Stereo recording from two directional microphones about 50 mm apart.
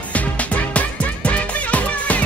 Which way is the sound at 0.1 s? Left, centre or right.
Left.